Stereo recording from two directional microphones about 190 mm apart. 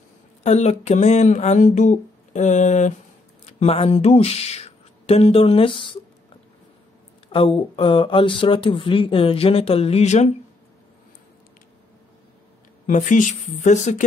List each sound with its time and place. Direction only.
0.4 s speech: 35° left (ahead or behind)
7.3 s speech: 30° left (ahead or behind)
12.8 s speech: 40° left (ahead or behind)